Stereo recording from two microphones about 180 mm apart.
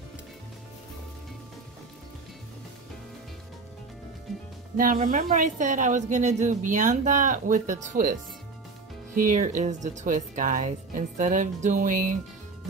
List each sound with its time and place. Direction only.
4.7 s a woman's voice: 45° right (ahead or behind)